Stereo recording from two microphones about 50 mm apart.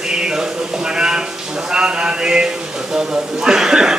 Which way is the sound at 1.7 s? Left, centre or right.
Centre.